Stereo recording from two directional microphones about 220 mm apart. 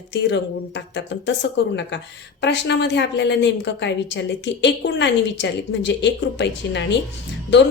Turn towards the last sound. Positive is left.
turn(degrees=55)  # may be behind; listen again after turning